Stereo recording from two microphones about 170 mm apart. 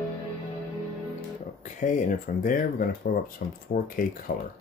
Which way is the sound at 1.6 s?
50° left (ahead or behind).